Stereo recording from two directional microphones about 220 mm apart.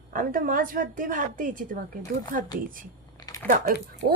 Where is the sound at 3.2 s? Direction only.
15° left (ahead or behind).